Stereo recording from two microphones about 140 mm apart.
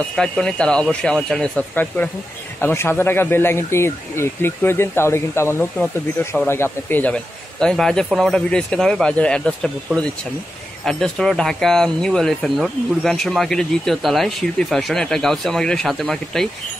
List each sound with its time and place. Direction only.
0.1 s speech: 5° left (ahead or behind)